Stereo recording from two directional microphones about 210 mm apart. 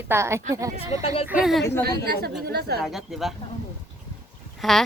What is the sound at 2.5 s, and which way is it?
Speech, 50° right (ahead or behind).